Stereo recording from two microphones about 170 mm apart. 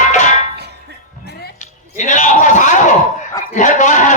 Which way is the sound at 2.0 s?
45° left (ahead or behind).